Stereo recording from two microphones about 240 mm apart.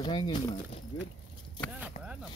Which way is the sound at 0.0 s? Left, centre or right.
Centre.